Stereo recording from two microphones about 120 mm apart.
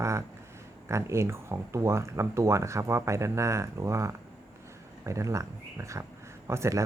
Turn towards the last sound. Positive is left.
turn(degrees=-25)  # may be behind; listen again after turning